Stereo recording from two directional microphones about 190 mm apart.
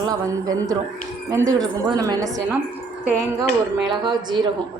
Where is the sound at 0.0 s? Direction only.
20° right (ahead or behind).